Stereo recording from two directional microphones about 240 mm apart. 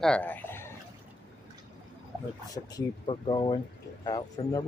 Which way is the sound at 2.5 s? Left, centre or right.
Centre.